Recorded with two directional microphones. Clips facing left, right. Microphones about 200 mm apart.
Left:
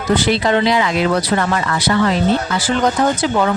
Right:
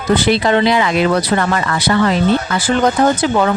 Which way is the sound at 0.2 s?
60° right (ahead or behind).